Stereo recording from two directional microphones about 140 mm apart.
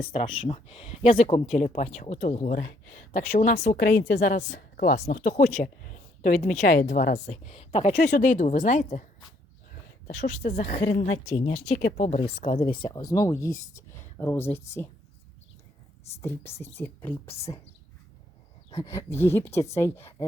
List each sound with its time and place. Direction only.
0.0 s speech: 40° left (ahead or behind)
1.2 s a woman's voice: 55° left (ahead or behind)
2.5 s a woman's voice: 80° left; by 3.8 s 50° left (ahead or behind)
3.8 s a woman's voice: 75° left (ahead or behind)
7.4 s a woman's voice: 45° left (ahead or behind); by 9.0 s 65° left (ahead or behind)
10.1 s speech: 55° left (ahead or behind)
11.0 s a woman's voice: 60° left (ahead or behind)
11.8 s a woman's voice: 75° left (ahead or behind)
12.1 s speech: 50° left (ahead or behind); by 14.8 s 15° left (ahead or behind)
16.2 s a woman's voice: 15° left (ahead or behind)
18.7 s a woman's voice: 25° left (ahead or behind)